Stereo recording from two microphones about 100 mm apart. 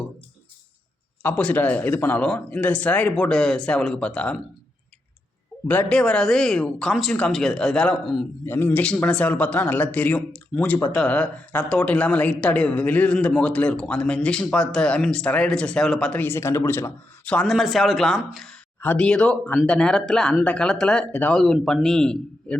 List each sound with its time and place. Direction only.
1.2 s speech: 15° left (ahead or behind)
5.6 s speech: 15° left (ahead or behind)
6.0 s speech: 5° left (ahead or behind)
8.4 s speech: 20° left (ahead or behind)
8.8 s speech: 10° left (ahead or behind)
16.2 s speech: 25° left (ahead or behind)
17.2 s speech: 10° left (ahead or behind)
17.5 s speech: centre (ahead or behind); by 21.3 s 15° left (ahead or behind)
21.3 s speech: centre (ahead or behind)